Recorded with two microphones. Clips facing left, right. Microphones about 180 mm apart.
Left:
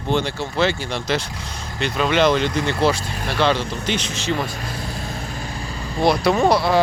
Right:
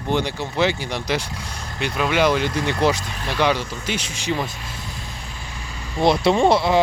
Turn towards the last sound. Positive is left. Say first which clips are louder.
# even
turn(degrees=-20)  # may be behind; listen again after turning